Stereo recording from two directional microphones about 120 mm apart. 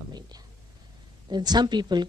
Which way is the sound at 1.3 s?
35° right (ahead or behind).